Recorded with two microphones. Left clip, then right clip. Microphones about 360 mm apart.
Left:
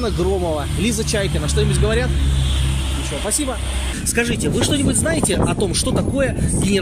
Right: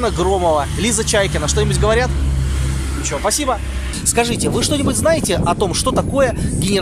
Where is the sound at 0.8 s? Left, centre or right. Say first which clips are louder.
Right 4 dB; centre.